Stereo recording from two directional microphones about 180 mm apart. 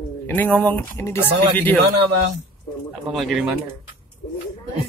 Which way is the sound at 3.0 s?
Centre (ahead or behind).